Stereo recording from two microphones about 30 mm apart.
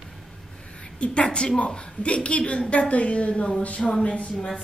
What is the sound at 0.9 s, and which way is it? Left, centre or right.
A woman's voice, left.